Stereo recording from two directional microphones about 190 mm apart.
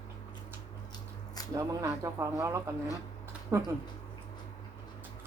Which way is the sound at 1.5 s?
15° right (ahead or behind).